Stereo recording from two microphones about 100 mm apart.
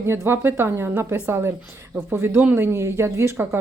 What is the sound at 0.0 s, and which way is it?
A woman's voice, 25° right (ahead or behind).